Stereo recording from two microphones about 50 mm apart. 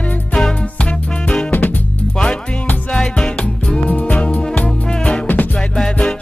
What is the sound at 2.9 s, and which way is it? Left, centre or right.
Music, centre.